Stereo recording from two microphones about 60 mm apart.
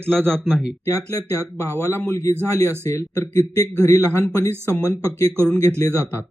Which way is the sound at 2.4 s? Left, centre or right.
Left.